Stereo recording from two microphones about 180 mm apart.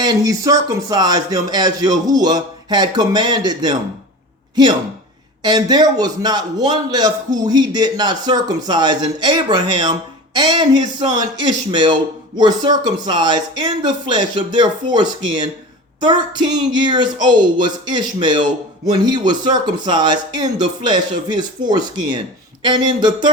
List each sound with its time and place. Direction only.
0.0 s a man's voice: 20° right (ahead or behind)